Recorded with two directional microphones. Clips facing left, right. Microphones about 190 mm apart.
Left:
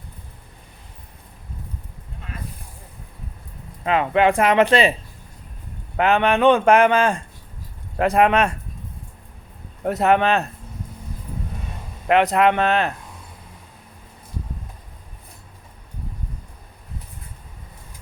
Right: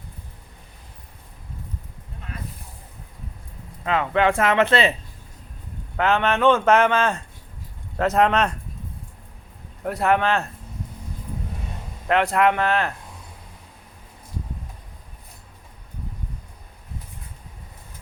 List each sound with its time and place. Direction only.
3.8 s a man's voice: 15° left (ahead or behind)
6.0 s a man's voice: 15° left (ahead or behind)
9.8 s speech: 20° left (ahead or behind)
12.0 s speech: 20° left (ahead or behind)